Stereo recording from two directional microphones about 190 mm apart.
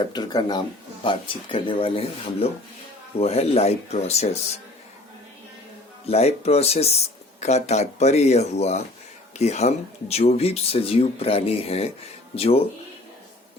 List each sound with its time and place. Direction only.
0.1 s speech: 20° left (ahead or behind)
6.1 s speech: 35° left (ahead or behind)